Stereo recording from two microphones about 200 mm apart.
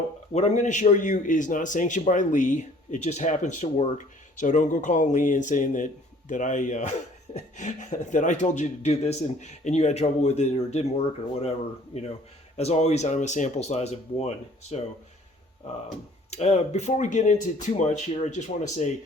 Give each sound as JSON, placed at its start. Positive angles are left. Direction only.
{"t": 0.3, "sound": "a man's voice", "side_deg": 35}
{"t": 12.5, "sound": "a man's voice", "side_deg": 35}
{"t": 16.3, "sound": "a man's voice", "side_deg": 35}